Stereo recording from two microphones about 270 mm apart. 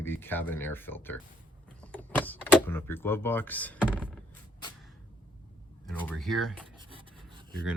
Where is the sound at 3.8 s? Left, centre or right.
Centre.